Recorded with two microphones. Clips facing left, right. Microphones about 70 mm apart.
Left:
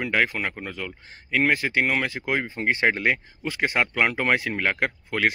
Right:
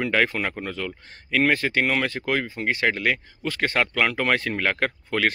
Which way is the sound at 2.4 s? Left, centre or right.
Left.